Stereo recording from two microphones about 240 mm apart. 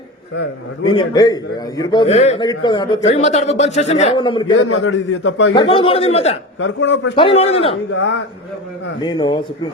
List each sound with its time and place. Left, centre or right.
0.9 s a man's voice: centre
4.8 s a man's voice: left
5.5 s a man's voice: left
6.6 s a man's voice: left
7.2 s a man's voice: left
7.9 s a man's voice: left
9.0 s a man's voice: centre